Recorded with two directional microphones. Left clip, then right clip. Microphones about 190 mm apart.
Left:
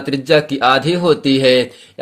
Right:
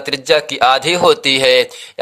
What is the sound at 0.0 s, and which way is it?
Speech, 30° right (ahead or behind).